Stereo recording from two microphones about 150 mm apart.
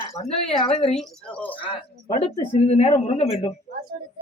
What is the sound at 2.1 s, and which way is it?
Speech, 35° left (ahead or behind).